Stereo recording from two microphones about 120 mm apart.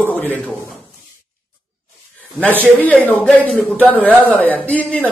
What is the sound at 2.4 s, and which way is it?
Speech, 15° left (ahead or behind).